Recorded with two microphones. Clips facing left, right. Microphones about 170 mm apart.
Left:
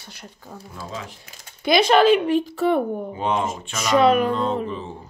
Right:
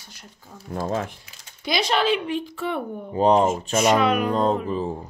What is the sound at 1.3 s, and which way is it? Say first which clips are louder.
A woman's voice: left 8 dB; 55° left (ahead or behind).